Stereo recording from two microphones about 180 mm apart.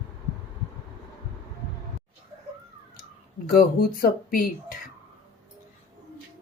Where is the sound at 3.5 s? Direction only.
55° left (ahead or behind).